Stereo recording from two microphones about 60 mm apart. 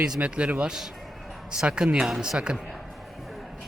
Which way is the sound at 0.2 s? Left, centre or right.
Centre.